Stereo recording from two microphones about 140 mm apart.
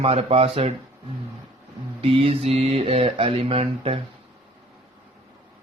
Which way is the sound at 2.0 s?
40° right (ahead or behind).